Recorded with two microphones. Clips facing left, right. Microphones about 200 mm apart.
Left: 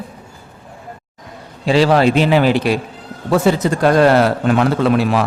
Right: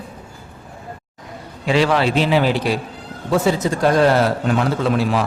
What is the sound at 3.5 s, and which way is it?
A man's voice, 65° left (ahead or behind).